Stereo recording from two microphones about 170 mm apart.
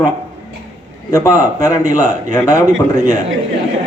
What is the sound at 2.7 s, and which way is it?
Speech, 55° right (ahead or behind).